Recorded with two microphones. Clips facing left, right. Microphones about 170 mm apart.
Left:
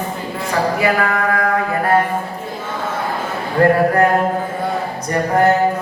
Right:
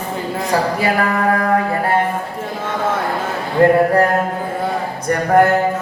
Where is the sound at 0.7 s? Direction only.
35° right (ahead or behind).